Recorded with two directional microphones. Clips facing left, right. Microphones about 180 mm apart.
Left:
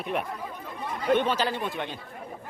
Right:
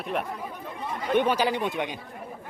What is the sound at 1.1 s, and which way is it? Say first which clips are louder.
Speech: right 2 dB; 10° right (ahead or behind).